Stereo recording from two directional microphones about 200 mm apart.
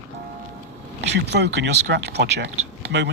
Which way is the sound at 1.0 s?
60° right (ahead or behind).